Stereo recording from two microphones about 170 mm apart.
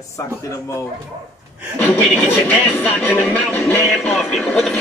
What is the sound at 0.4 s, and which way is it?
Speech, 15° left (ahead or behind).